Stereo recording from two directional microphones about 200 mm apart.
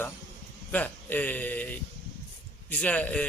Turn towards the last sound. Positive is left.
turn(degrees=5)  # may be behind; listen again after turning